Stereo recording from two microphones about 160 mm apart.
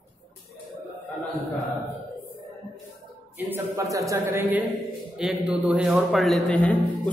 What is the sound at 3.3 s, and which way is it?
A woman's voice, 15° right (ahead or behind).